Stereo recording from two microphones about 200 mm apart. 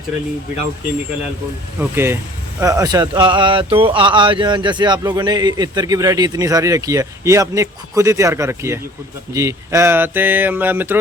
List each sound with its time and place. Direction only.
1.8 s speech: 10° right (ahead or behind)